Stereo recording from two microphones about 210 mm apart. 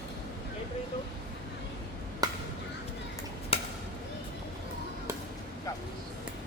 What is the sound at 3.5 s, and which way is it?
Chop, 25° left (ahead or behind).